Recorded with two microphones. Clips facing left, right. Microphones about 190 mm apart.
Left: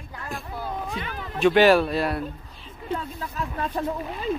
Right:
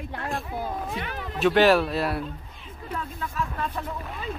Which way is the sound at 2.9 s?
30° left (ahead or behind).